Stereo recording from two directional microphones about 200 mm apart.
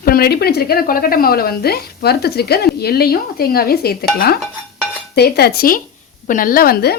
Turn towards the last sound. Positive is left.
turn(degrees=50)  # may be behind; listen again after turning